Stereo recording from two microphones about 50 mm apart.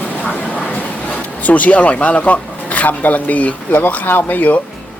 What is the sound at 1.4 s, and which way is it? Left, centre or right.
Speech, left.